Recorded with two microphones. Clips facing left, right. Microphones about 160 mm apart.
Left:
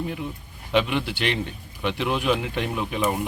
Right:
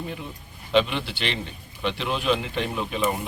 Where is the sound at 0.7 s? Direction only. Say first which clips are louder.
Even; 10° left (ahead or behind).